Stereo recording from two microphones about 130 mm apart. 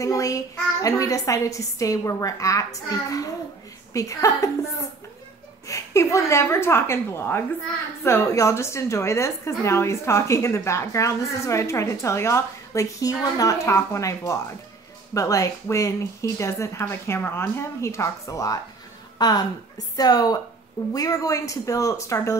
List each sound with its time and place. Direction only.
0.0 s a woman's voice: 25° left (ahead or behind)
5.7 s a woman's voice: 25° left (ahead or behind)